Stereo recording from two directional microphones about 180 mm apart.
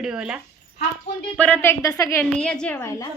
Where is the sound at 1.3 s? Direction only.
10° left (ahead or behind).